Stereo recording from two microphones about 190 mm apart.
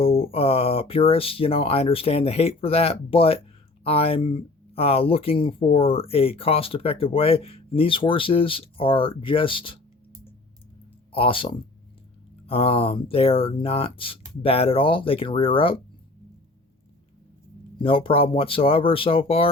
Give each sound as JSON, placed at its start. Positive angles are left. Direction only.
{"t": 0.0, "sound": "speech", "side_deg": 30}
{"t": 11.1, "sound": "speech", "side_deg": 30}
{"t": 17.8, "sound": "speech", "side_deg": 30}